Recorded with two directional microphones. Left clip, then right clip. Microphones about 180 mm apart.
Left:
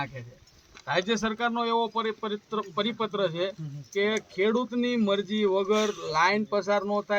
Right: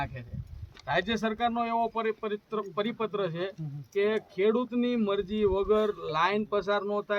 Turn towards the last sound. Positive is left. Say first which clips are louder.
# left 3 dB
turn(degrees=0)  # may be behind; listen again after turning